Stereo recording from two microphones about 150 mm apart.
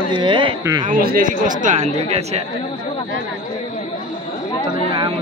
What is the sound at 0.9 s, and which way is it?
Speech, 75° right (ahead or behind).